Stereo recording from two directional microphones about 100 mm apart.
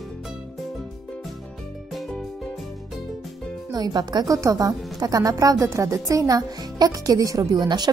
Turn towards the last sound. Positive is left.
turn(degrees=-45)  # may be behind; listen again after turning